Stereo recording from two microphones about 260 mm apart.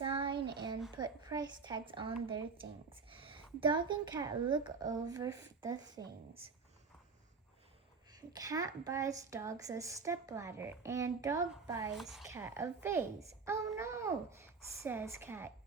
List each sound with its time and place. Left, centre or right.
0.0 s a sound: centre
0.9 s a woman's voice: centre
8.1 s a woman's voice: centre
11.9 s a woman's voice: centre